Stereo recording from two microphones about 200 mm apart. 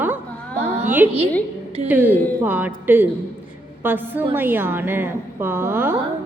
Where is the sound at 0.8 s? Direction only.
10° right (ahead or behind).